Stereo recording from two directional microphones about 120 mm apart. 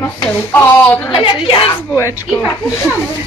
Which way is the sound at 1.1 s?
40° left (ahead or behind).